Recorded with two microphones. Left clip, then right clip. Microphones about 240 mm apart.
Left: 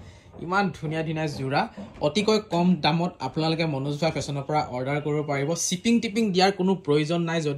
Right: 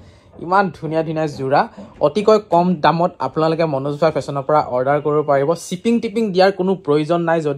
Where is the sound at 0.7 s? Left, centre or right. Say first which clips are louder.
Right 10 dB; right.